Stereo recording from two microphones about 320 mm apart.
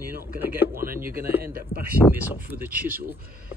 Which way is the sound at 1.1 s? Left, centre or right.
Centre.